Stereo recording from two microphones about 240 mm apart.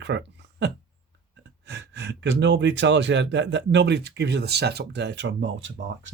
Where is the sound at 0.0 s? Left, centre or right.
Right.